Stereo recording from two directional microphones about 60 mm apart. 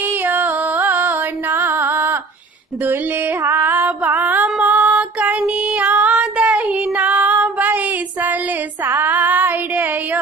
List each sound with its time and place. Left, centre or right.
0.0 s music: right
4.6 s music: centre
5.5 s child singing: right